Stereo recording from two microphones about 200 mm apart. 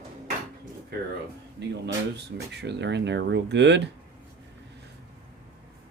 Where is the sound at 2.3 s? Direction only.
55° right (ahead or behind).